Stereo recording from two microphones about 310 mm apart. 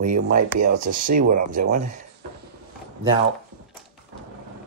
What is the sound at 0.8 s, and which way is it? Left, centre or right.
Speech, right.